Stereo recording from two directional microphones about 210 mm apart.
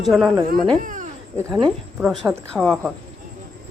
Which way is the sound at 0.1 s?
Centre (ahead or behind).